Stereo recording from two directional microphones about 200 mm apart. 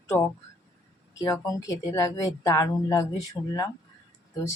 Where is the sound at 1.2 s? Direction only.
20° left (ahead or behind).